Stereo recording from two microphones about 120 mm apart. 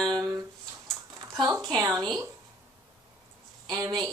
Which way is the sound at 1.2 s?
30° right (ahead or behind).